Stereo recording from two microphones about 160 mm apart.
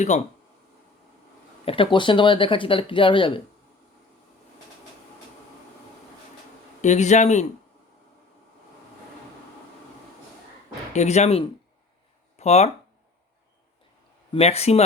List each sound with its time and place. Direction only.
0.1 s speech: 45° left (ahead or behind)
1.6 s speech: 35° left (ahead or behind)
6.8 s speech: 45° left (ahead or behind)
10.9 s speech: 45° left (ahead or behind)
14.3 s speech: 40° left (ahead or behind)